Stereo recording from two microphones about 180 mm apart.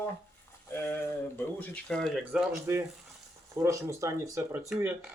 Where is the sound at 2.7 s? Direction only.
15° right (ahead or behind).